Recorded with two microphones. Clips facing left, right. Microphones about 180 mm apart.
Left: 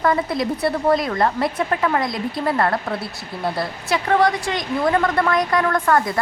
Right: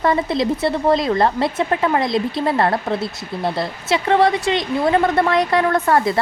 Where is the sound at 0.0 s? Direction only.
25° right (ahead or behind).